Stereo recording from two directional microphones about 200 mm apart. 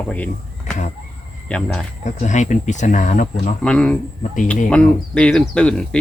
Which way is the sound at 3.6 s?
5° left (ahead or behind).